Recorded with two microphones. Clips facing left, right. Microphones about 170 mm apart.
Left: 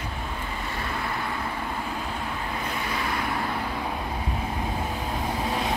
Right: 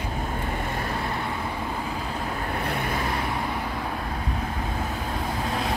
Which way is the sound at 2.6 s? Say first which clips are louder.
Right 4 dB; 60° right (ahead or behind).